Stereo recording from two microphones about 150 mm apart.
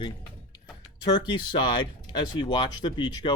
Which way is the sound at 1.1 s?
30° left (ahead or behind).